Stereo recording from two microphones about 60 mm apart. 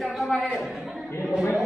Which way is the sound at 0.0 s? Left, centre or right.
Centre.